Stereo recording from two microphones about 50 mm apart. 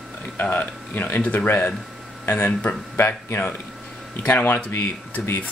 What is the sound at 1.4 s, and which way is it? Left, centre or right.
Speech, left.